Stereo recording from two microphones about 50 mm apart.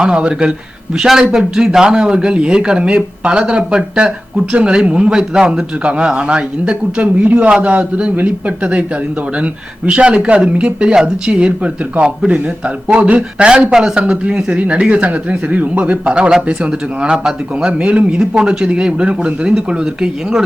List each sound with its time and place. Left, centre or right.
0.0 s speech: centre
0.9 s speech: centre